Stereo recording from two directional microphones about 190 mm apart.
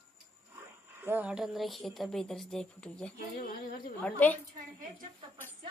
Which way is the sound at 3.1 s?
50° left (ahead or behind).